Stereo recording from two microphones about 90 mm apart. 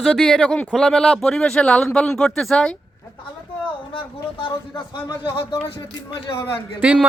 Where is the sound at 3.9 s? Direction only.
75° left (ahead or behind).